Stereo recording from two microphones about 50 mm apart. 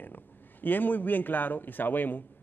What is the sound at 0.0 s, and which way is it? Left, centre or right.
Speech, left.